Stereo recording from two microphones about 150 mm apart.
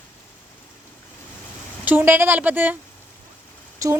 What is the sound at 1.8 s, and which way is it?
Speech, 15° right (ahead or behind).